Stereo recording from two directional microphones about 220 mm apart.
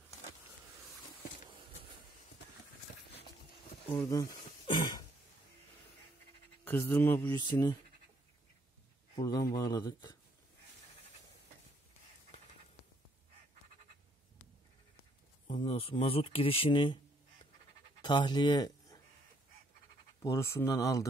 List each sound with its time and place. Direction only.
3.9 s speech: 10° left (ahead or behind)
6.6 s speech: 10° left (ahead or behind)
9.1 s speech: 15° left (ahead or behind)
12.3 s music: 35° left (ahead or behind)
15.4 s speech: 25° left (ahead or behind)
18.0 s speech: 20° left (ahead or behind)
20.2 s speech: 10° left (ahead or behind)